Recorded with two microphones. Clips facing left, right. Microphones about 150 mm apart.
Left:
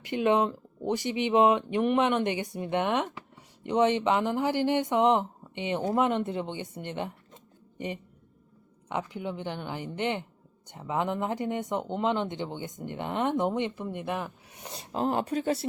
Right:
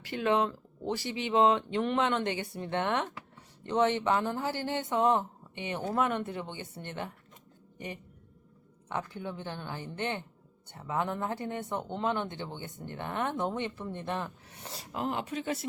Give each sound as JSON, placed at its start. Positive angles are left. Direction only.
{"t": 0.0, "sound": "speech", "side_deg": 20}
{"t": 8.9, "sound": "speech", "side_deg": 15}
{"t": 14.9, "sound": "speech", "side_deg": 40}